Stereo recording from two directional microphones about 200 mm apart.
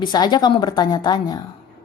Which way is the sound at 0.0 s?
20° left (ahead or behind).